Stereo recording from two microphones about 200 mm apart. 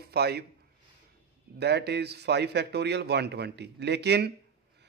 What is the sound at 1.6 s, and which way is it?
A man's voice, 55° right (ahead or behind).